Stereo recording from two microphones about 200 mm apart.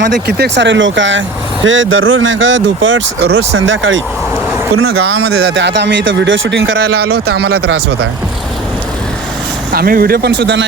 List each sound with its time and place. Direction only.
0.0 s a man's voice: 55° right (ahead or behind)
4.9 s a man's voice: 60° right (ahead or behind)
9.7 s speech: 50° right (ahead or behind)